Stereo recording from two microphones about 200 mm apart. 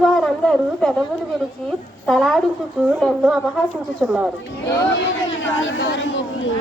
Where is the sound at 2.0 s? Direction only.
Centre (ahead or behind).